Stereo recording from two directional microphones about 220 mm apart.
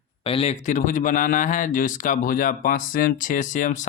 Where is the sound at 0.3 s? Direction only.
25° left (ahead or behind).